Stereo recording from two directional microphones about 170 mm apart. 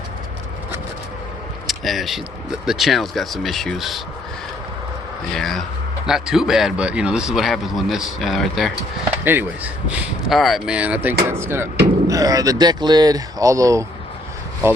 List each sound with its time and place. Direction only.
1.6 s speech: centre (ahead or behind)
5.3 s speech: centre (ahead or behind)
9.2 s speech: 10° right (ahead or behind)
10.2 s speech: centre (ahead or behind); by 13.8 s 20° right (ahead or behind)